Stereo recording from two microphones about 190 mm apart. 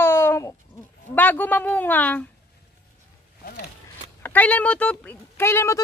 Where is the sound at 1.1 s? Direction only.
10° left (ahead or behind).